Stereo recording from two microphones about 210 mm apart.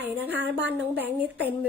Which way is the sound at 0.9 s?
10° right (ahead or behind).